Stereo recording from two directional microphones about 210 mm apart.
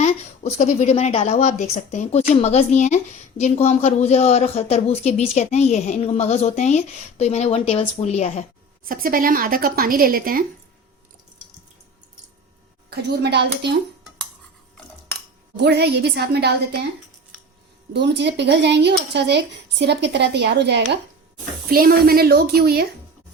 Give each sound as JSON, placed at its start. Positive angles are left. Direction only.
{"t": 0.0, "sound": "a woman's voice", "side_deg": 30}
{"t": 8.9, "sound": "a woman's voice", "side_deg": -40}
{"t": 12.9, "sound": "a woman's voice", "side_deg": -50}
{"t": 15.6, "sound": "a woman's voice", "side_deg": -55}
{"t": 17.9, "sound": "a woman's voice", "side_deg": -55}